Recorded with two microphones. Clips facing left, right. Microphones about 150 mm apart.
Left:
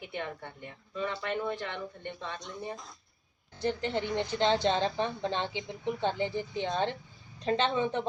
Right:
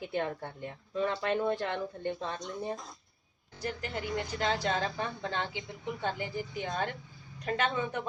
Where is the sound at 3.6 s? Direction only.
25° left (ahead or behind).